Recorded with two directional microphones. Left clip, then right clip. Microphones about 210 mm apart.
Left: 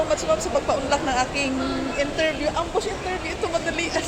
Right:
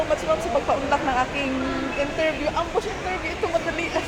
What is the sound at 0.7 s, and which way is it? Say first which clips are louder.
Speech: right 1 dB; 10° right (ahead or behind).